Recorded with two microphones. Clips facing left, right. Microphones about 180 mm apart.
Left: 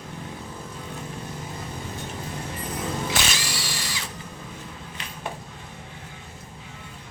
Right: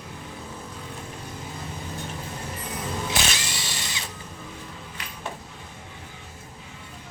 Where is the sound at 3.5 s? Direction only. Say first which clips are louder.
Left 2 dB; 20° right (ahead or behind).